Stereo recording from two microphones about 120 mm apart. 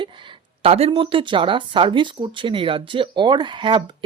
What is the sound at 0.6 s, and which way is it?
Speech, 55° right (ahead or behind).